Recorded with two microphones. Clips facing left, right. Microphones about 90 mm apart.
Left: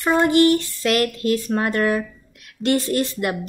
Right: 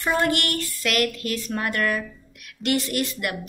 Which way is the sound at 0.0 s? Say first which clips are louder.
Left 7 dB; 20° left (ahead or behind).